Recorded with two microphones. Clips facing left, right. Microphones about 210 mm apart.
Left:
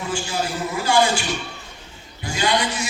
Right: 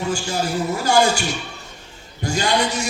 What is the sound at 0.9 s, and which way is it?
Speech, 45° right (ahead or behind).